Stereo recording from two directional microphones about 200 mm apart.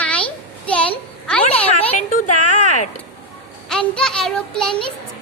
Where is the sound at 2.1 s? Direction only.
40° left (ahead or behind).